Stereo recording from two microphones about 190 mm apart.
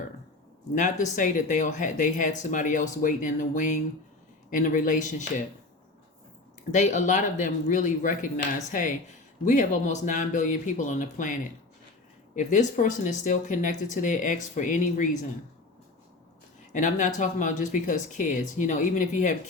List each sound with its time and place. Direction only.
0.8 s speech: 40° left (ahead or behind)
6.7 s speech: 40° left (ahead or behind)
12.4 s speech: 40° left (ahead or behind)
16.7 s speech: 40° left (ahead or behind)